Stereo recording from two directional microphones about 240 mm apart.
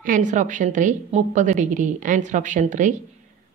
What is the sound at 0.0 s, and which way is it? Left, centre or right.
A woman's voice, right.